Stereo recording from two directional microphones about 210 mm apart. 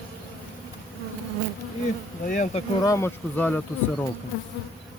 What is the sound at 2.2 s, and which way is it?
Insect, 35° left (ahead or behind).